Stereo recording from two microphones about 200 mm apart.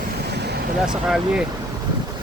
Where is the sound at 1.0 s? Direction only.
5° right (ahead or behind).